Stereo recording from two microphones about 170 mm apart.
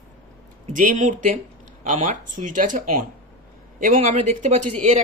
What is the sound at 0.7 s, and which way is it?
Speech, 50° right (ahead or behind).